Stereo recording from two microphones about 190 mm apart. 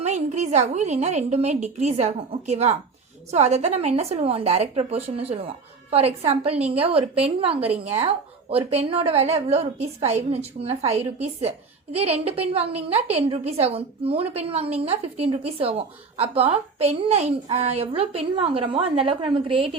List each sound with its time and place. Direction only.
0.0 s a woman's voice: 35° right (ahead or behind)